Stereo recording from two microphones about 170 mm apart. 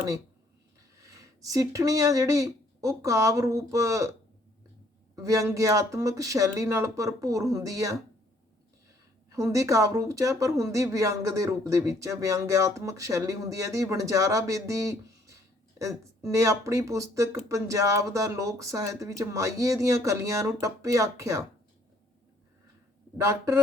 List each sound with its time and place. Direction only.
0.9 s speech: 20° right (ahead or behind)
5.1 s speech: 20° right (ahead or behind)
9.3 s speech: 20° right (ahead or behind)
23.1 s speech: 15° right (ahead or behind)